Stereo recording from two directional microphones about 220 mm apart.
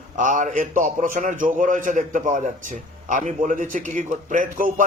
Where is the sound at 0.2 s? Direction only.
35° right (ahead or behind).